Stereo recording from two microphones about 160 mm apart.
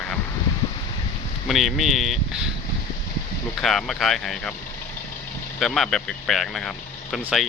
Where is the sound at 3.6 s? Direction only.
Centre (ahead or behind).